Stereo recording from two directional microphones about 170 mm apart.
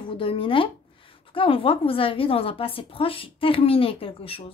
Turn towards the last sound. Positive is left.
turn(degrees=35)  # may be behind; listen again after turning